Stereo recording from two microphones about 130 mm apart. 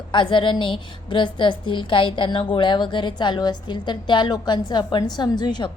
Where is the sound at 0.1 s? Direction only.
40° left (ahead or behind).